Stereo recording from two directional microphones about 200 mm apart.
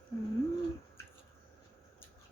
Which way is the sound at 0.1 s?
15° left (ahead or behind).